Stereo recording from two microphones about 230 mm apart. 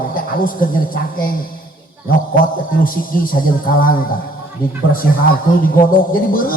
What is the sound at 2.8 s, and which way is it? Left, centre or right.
A man's voice, left.